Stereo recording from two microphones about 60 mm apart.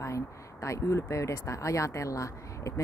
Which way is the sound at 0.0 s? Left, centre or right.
Left.